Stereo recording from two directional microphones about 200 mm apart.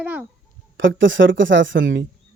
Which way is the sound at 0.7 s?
70° right (ahead or behind).